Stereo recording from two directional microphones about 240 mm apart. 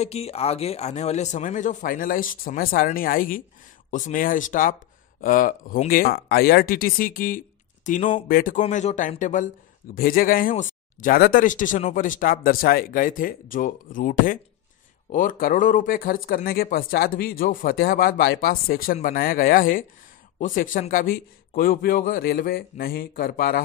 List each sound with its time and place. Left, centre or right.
0.0 s speech: left